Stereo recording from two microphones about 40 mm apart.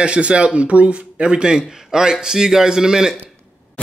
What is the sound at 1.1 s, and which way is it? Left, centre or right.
A man's voice, centre.